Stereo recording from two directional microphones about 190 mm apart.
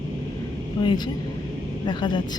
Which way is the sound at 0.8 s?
25° left (ahead or behind).